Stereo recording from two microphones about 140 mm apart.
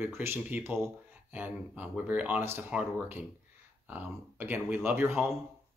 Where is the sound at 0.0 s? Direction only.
15° right (ahead or behind).